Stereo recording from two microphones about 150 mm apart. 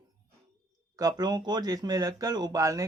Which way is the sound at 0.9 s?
25° right (ahead or behind).